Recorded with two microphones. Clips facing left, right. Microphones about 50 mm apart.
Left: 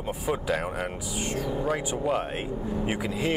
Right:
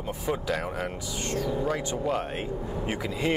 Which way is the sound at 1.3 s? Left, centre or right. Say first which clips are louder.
Right 2 dB; left.